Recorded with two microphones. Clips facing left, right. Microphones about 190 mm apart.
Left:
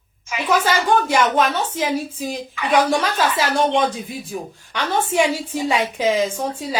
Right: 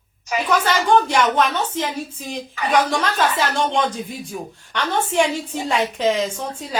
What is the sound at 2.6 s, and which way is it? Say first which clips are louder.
Speech: right 3 dB; 40° right (ahead or behind).